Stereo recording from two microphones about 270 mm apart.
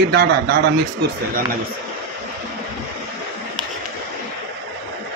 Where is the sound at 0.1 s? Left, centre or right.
Right.